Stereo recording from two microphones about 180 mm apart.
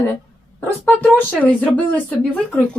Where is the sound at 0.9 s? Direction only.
Centre (ahead or behind).